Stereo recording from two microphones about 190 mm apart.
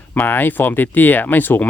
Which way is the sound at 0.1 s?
10° left (ahead or behind).